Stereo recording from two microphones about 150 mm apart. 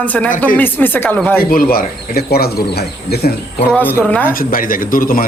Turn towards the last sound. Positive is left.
turn(degrees=70)  # may be behind; listen again after turning